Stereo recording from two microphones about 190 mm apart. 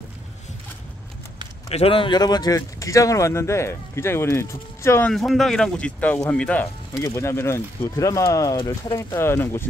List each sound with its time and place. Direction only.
1.7 s speech: 30° left (ahead or behind); by 5.1 s 15° left (ahead or behind)
5.1 s speech: centre (ahead or behind)